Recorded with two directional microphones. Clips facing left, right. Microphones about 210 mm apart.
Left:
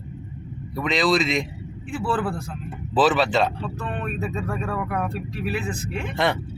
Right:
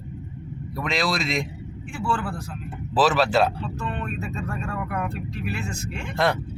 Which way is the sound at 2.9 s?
5° right (ahead or behind).